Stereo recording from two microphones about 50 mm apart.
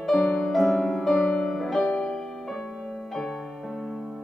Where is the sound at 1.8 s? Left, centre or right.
Left.